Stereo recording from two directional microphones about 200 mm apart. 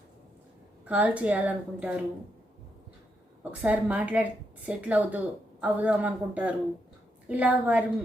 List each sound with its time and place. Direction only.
0.9 s a woman's voice: 5° right (ahead or behind)
3.6 s a woman's voice: 10° right (ahead or behind)